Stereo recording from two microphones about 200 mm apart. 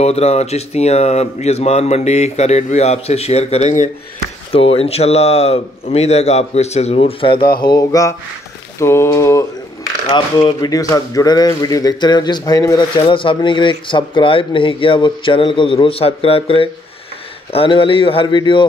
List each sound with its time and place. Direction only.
0.0 s speech: 35° left (ahead or behind)